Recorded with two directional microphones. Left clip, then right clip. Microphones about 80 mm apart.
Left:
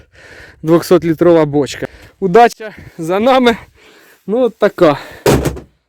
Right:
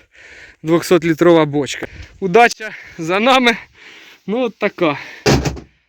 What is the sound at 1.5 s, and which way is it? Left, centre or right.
Speech, left.